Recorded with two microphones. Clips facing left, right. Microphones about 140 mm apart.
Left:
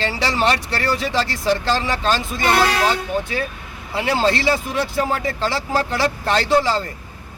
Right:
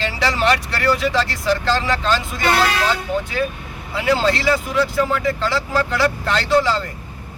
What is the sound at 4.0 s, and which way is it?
Speech, 25° left (ahead or behind).